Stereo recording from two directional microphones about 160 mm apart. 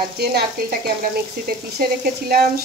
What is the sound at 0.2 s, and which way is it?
Speech, 80° right.